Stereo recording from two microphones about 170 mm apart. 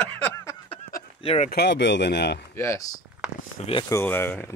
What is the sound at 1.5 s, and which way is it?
Speech, 80° left.